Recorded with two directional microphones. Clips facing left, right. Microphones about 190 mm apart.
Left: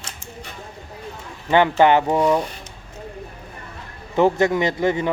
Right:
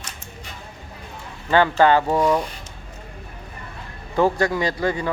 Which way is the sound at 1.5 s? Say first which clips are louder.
Left 1 dB; 20° left (ahead or behind).